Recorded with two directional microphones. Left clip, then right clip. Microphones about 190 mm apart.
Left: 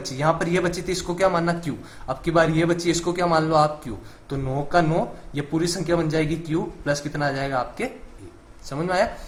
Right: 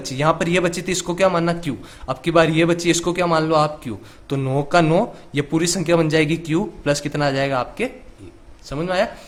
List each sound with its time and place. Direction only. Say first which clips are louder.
0.0 s a man's voice: right 3 dB; 40° right (ahead or behind)
4.3 s speech: right 5 dB; 45° right (ahead or behind)